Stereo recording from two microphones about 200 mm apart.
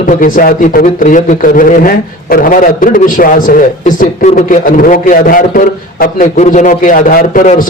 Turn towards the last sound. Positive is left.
turn(degrees=40)  # may be behind; listen again after turning